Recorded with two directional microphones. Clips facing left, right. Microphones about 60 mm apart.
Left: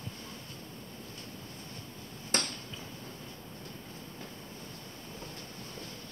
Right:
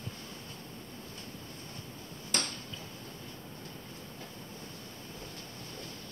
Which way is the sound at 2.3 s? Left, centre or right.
Left.